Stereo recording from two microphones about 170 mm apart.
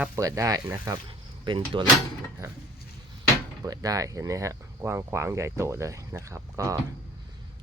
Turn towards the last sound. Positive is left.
turn(degrees=-15)  # may be behind; listen again after turning